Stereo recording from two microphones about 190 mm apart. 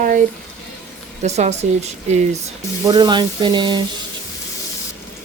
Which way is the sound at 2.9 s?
20° right (ahead or behind).